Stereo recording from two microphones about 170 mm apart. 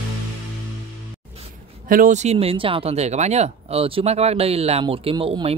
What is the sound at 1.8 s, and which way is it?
Speech, 50° right (ahead or behind).